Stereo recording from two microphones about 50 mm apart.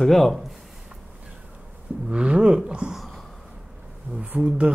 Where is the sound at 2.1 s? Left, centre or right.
Centre.